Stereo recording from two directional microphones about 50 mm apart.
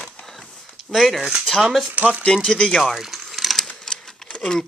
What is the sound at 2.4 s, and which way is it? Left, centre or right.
Speech, centre.